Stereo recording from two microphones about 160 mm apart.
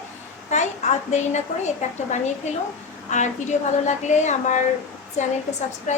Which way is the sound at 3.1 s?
50° left (ahead or behind).